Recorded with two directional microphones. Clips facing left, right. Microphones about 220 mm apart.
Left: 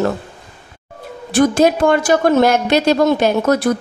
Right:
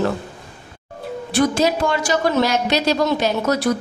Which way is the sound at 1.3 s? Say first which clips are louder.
Left 5 dB; 50° left (ahead or behind).